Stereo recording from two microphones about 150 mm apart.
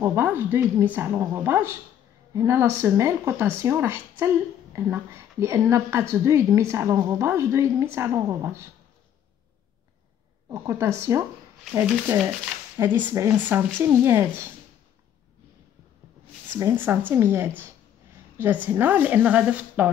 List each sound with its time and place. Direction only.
0.0 s a woman's voice: 15° right (ahead or behind)
10.5 s a woman's voice: 20° right (ahead or behind)
12.7 s a woman's voice: 15° right (ahead or behind)
16.5 s a woman's voice: 15° right (ahead or behind)